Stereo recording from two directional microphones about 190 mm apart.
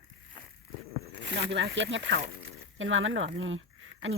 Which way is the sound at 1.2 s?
65° right (ahead or behind).